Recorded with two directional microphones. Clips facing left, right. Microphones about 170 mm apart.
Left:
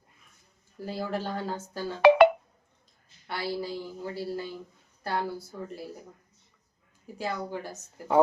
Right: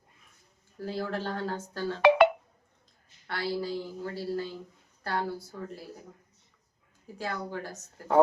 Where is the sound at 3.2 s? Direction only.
15° left (ahead or behind).